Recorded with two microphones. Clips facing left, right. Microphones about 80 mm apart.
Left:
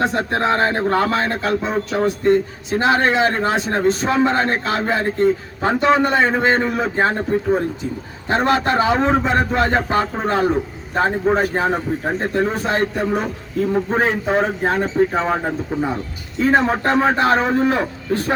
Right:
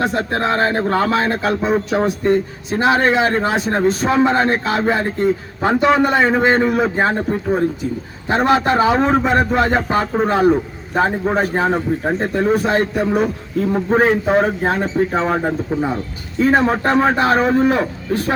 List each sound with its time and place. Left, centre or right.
0.2 s speech: centre
0.9 s a man's voice: centre